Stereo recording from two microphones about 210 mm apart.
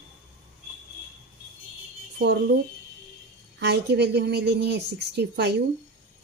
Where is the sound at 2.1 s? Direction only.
50° right (ahead or behind).